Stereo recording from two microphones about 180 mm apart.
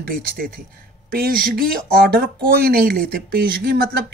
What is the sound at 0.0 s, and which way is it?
Speech, 55° right (ahead or behind).